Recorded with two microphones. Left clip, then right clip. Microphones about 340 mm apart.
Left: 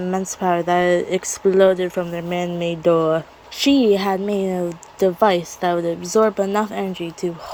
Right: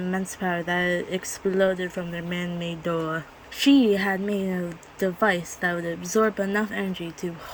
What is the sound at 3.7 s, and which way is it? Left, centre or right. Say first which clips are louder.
Speech: left 4 dB; left.